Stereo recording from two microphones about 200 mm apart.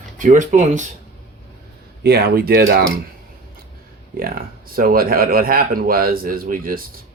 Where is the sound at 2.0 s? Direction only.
50° right (ahead or behind).